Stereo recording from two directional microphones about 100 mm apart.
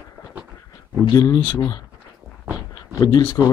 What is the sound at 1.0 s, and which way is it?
Speech, 40° left (ahead or behind).